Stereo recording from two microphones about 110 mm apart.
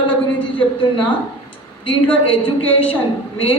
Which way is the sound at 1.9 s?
55° left (ahead or behind).